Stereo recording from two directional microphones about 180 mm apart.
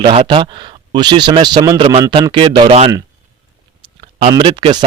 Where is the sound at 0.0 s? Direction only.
30° right (ahead or behind).